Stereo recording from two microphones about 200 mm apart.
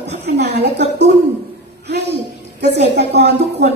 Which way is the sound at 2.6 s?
55° right (ahead or behind).